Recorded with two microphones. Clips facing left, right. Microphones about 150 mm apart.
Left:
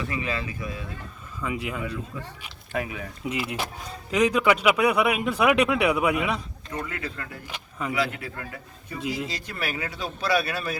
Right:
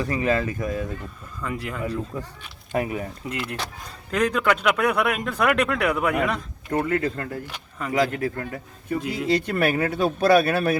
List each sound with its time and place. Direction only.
0.0 s speech: 40° right (ahead or behind)
1.4 s speech: 5° left (ahead or behind)
2.7 s speech: 40° right (ahead or behind)
3.2 s speech: 5° left (ahead or behind)
6.7 s speech: 55° right (ahead or behind)
8.9 s a man's voice: 60° right (ahead or behind)